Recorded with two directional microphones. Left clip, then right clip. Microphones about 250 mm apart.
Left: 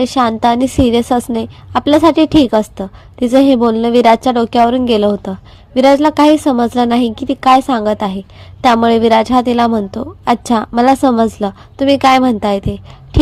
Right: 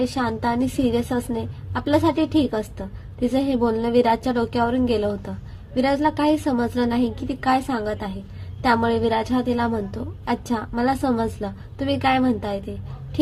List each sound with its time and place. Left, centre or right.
0.0 s a woman's voice: left